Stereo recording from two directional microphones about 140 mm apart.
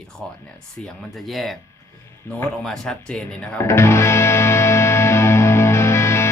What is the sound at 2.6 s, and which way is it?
Speech, 5° left (ahead or behind).